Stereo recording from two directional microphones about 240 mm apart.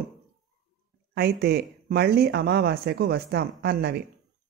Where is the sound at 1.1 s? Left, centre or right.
Right.